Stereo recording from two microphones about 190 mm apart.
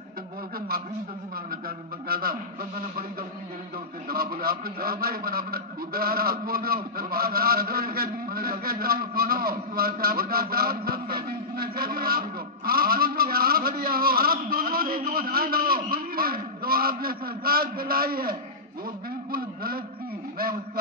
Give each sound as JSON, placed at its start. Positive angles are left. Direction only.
{"t": 2.0, "sound": "a man's voice", "side_deg": -50}
{"t": 4.1, "sound": "a man's voice", "side_deg": -50}
{"t": 19.3, "sound": "a sound", "side_deg": -50}